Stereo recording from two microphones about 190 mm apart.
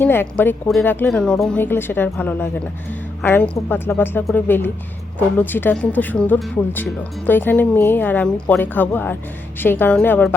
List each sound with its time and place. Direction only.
0.0 s a woman's voice: 10° left (ahead or behind)